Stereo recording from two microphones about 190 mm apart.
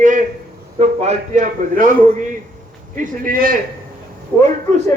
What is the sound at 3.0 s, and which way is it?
Speech, 45° right (ahead or behind).